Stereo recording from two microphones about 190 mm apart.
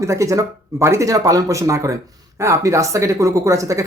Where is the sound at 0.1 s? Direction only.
15° right (ahead or behind).